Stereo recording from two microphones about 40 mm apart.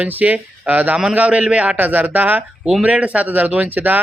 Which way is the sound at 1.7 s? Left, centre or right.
Right.